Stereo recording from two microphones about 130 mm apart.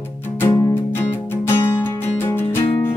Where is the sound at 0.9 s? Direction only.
20° left (ahead or behind).